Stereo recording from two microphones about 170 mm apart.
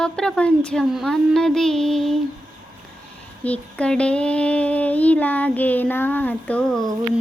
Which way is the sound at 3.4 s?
10° left (ahead or behind).